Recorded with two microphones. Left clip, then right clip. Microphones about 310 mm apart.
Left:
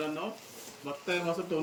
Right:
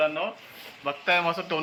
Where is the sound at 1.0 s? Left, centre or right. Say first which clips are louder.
Right 8 dB; centre.